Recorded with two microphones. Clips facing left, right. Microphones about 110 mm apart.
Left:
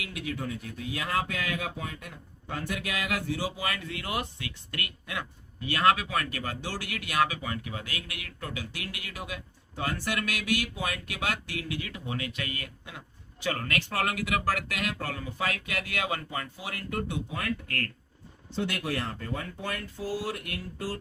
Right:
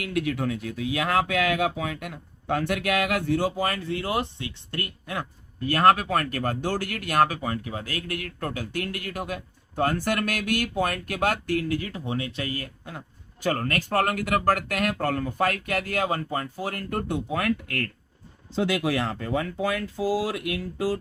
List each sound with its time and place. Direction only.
0.0 s speech: 60° right (ahead or behind)
17.3 s speech: 80° right
18.7 s speech: 90° right